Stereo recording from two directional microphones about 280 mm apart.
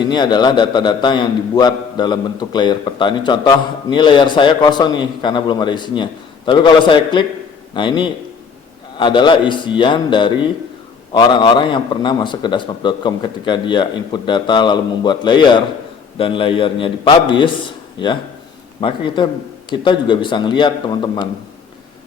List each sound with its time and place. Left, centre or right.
0.0 s a man's voice: centre